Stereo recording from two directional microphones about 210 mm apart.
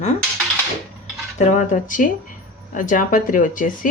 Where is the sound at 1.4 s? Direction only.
35° left (ahead or behind).